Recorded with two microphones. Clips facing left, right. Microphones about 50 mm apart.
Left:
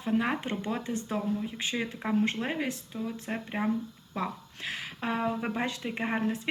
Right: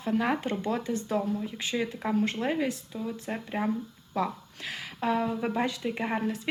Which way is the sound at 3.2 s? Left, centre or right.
Centre.